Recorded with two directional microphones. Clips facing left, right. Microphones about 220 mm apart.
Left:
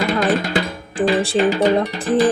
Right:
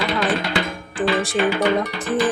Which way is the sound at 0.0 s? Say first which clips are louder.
Left 3 dB; 40° left (ahead or behind).